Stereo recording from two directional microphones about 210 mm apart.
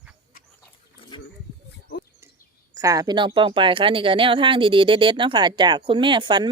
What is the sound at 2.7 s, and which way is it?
Speech, 15° right (ahead or behind).